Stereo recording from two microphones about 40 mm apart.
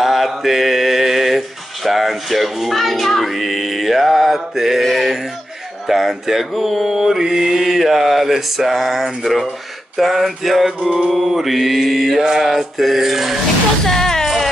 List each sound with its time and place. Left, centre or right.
0.0 s mantra: centre
7.7 s mantra: centre
10.8 s male singing: right
11.1 s mantra: centre
13.8 s music: centre